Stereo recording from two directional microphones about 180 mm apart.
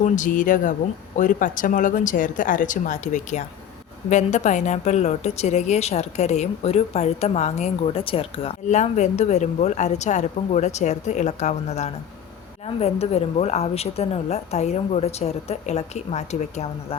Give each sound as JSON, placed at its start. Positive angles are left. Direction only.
{"t": 0.0, "sound": "a woman's voice", "side_deg": 45}